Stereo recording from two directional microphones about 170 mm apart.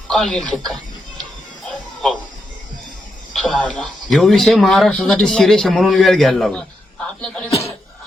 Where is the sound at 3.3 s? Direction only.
Centre (ahead or behind).